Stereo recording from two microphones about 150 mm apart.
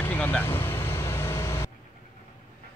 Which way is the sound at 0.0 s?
15° left (ahead or behind).